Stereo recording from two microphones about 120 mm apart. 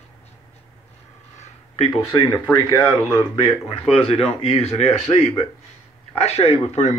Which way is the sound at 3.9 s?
55° left (ahead or behind).